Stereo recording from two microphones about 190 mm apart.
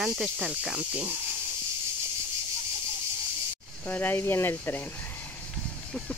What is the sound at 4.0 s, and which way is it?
Speech, 10° left (ahead or behind).